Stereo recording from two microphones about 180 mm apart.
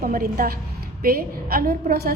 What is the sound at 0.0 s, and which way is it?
A woman's voice, 55° right (ahead or behind).